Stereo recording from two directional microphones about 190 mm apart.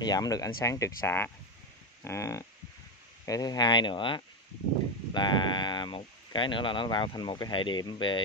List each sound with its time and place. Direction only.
0.0 s speech: 20° left (ahead or behind)